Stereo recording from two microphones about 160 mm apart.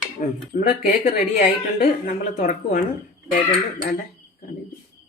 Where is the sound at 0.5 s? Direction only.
60° left (ahead or behind).